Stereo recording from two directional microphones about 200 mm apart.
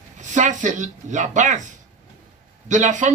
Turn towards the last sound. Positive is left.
turn(degrees=-40)  # may be behind; listen again after turning